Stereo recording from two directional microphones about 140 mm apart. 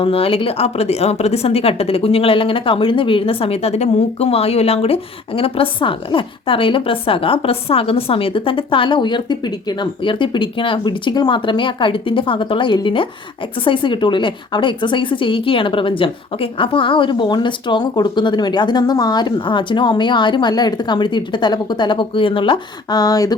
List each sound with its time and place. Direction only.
0.0 s speech: 40° left (ahead or behind); by 23.3 s 25° left (ahead or behind)